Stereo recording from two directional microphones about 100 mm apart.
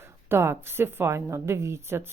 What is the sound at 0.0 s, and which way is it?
A woman's voice, 25° right (ahead or behind).